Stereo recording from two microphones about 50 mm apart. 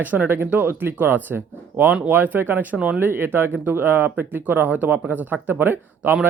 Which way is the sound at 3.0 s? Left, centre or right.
Right.